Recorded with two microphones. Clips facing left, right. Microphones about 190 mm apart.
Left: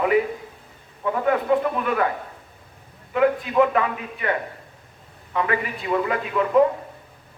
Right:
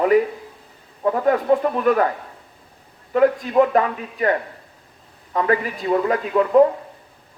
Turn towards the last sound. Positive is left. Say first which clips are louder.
# right 4 dB
turn(degrees=-40)  # may be behind; listen again after turning